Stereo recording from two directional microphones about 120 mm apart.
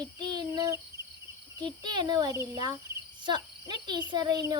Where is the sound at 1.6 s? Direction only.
40° right (ahead or behind).